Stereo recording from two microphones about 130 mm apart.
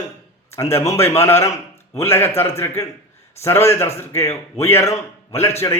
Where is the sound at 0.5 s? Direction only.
20° left (ahead or behind).